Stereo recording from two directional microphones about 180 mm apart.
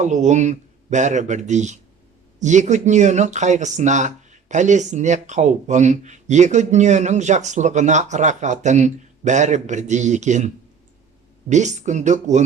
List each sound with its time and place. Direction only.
0.0 s speech: 40° right (ahead or behind)